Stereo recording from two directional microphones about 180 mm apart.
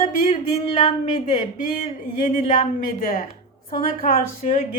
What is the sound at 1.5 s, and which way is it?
Speech, 50° left (ahead or behind).